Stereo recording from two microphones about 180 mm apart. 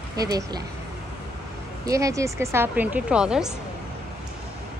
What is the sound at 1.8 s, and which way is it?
Speech, 20° right (ahead or behind).